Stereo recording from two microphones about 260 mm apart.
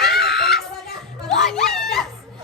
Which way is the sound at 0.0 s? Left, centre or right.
Centre.